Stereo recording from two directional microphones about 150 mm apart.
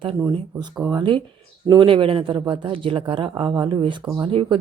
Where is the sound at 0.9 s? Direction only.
30° right (ahead or behind).